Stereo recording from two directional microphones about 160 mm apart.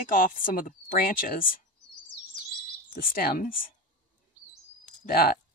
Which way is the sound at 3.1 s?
65° left (ahead or behind).